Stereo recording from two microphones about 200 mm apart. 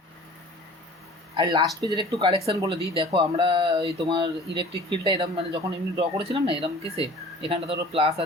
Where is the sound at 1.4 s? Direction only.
25° right (ahead or behind).